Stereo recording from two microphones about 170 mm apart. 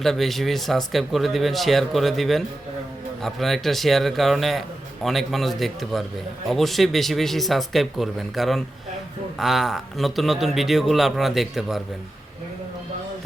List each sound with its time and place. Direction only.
0.0 s speech: centre (ahead or behind)